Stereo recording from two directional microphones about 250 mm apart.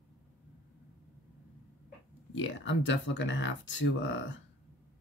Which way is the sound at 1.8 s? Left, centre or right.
Left.